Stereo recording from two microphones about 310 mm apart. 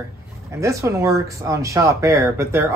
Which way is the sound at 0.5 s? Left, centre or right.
Centre.